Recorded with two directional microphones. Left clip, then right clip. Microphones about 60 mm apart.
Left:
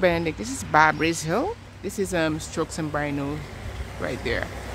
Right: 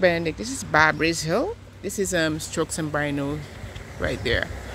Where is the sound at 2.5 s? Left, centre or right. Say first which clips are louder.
Right 2 dB; right.